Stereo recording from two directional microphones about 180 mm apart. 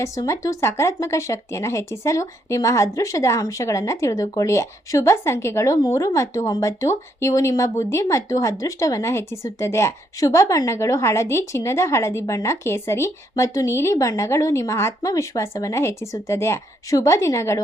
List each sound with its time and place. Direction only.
0.0 s speech: 15° left (ahead or behind)